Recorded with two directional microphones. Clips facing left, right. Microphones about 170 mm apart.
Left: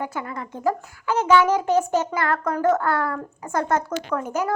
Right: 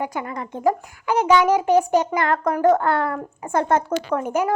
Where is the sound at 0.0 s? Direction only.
15° right (ahead or behind).